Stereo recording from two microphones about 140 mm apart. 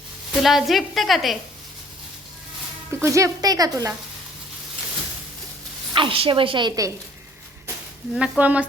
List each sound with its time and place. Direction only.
0.4 s a woman's voice: centre (ahead or behind)
2.9 s a woman's voice: 20° right (ahead or behind)
5.9 s a woman's voice: 40° right (ahead or behind)
8.1 s speech: 10° right (ahead or behind)